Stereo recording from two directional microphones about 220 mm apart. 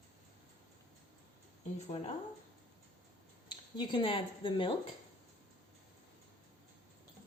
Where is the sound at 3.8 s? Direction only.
20° left (ahead or behind).